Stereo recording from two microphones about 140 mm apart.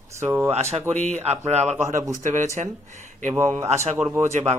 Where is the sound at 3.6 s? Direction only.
50° right (ahead or behind).